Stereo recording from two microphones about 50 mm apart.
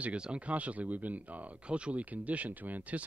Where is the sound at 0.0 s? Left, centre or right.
Right.